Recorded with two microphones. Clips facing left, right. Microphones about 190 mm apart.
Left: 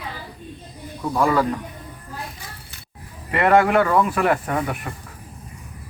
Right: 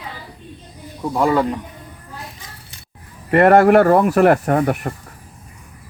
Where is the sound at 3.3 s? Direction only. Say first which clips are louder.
Right 6 dB; 50° right (ahead or behind).